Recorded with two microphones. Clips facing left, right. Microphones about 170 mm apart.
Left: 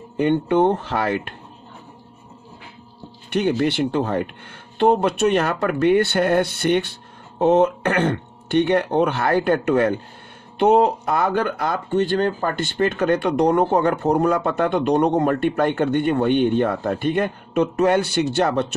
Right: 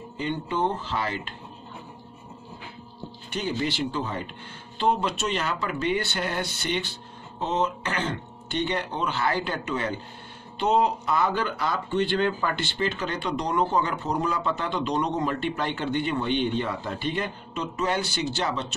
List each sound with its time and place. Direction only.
0.2 s speech: 60° left (ahead or behind)
3.3 s speech: 60° left (ahead or behind)